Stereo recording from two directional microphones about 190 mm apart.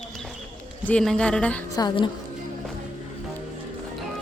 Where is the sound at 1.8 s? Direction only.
25° left (ahead or behind).